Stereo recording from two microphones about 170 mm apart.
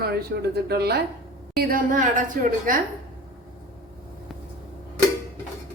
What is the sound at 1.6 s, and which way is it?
Speech, 55° right (ahead or behind).